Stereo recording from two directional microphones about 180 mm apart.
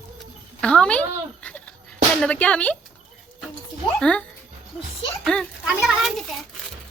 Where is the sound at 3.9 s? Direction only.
5° left (ahead or behind).